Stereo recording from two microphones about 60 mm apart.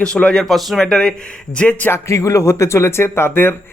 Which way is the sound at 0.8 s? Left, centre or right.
Centre.